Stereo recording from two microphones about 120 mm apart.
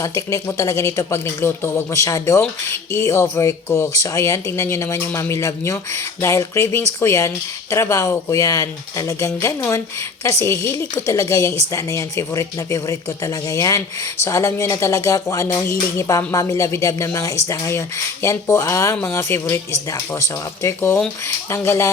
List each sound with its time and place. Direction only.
0.0 s speech: 25° left (ahead or behind)